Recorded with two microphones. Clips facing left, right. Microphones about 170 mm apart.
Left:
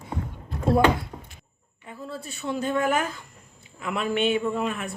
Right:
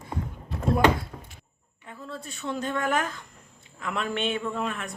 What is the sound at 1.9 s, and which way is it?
A man's voice, 5° left (ahead or behind).